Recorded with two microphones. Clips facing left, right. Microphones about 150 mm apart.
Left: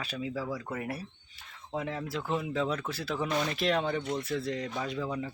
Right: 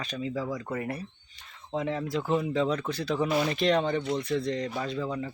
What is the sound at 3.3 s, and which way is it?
Speech, 5° right (ahead or behind).